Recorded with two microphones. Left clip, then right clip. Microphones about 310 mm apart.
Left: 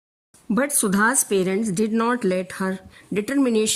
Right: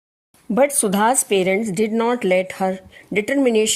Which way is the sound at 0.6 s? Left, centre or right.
Centre.